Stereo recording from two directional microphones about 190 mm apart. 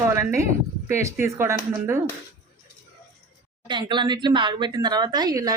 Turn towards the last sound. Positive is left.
turn(degrees=-20)  # may be behind; listen again after turning